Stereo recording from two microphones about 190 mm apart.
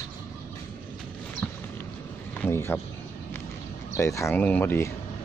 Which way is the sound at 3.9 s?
15° left (ahead or behind).